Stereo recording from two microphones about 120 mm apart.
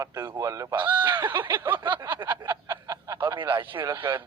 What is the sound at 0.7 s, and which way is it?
A man's voice, 40° right (ahead or behind).